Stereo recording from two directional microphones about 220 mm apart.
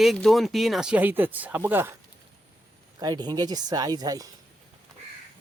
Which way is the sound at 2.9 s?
20° right (ahead or behind).